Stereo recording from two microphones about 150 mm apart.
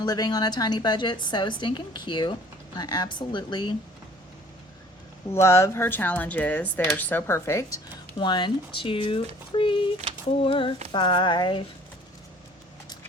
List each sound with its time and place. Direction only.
0.0 s a woman's voice: 25° left (ahead or behind)
5.3 s speech: 20° left (ahead or behind)
8.2 s speech: 30° left (ahead or behind)